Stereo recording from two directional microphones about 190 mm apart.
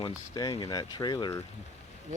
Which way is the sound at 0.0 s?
20° left (ahead or behind).